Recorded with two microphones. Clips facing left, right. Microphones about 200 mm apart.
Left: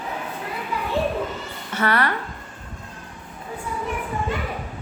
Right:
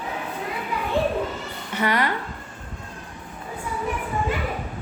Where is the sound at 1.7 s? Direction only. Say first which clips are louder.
Left 1 dB; 15° right (ahead or behind).